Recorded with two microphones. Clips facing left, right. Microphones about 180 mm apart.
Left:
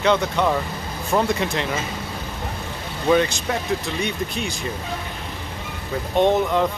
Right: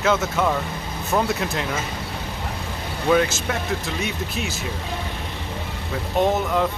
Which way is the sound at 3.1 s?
Centre (ahead or behind).